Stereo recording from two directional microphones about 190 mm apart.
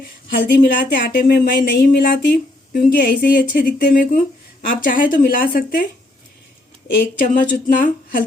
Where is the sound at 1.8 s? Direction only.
55° left (ahead or behind).